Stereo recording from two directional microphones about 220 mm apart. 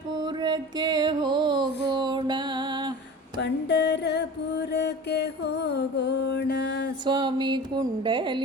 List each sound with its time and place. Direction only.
0.2 s music: 20° right (ahead or behind)
3.4 s mantra: 50° left (ahead or behind)
7.0 s music: 20° right (ahead or behind)